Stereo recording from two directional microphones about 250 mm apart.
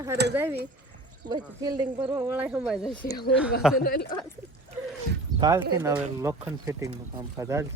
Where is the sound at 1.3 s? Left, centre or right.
Centre.